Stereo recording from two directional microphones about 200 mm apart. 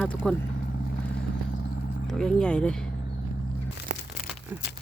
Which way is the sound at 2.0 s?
5° left (ahead or behind).